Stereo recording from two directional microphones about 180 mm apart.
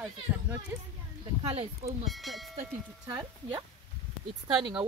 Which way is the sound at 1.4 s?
35° right (ahead or behind).